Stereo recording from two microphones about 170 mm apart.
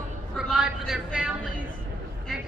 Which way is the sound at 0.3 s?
Centre (ahead or behind).